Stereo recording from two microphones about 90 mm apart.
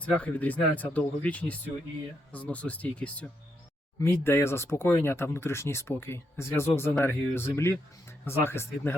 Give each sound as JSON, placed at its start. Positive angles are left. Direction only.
{"t": 0.0, "sound": "speech", "side_deg": 15}
{"t": 4.0, "sound": "speech", "side_deg": 30}